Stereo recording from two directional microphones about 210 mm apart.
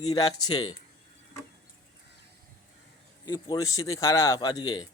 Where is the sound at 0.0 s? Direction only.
15° left (ahead or behind).